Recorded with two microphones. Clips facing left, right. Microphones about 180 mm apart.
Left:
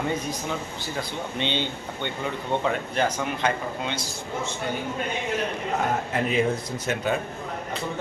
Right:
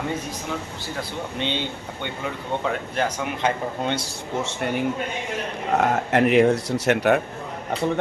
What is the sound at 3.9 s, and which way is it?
Speech, 70° right (ahead or behind).